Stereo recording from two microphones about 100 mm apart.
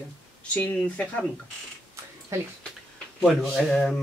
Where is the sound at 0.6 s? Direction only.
15° left (ahead or behind).